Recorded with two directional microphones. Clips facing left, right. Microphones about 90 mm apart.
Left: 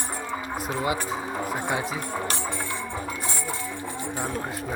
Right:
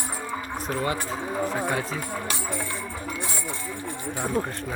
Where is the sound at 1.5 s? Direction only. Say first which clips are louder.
Right 1 dB; 20° left (ahead or behind).